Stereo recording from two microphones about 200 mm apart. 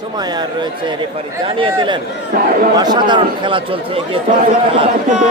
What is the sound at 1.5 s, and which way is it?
Speech, 25° right (ahead or behind).